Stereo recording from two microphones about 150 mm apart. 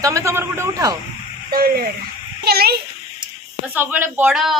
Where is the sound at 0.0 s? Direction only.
20° right (ahead or behind).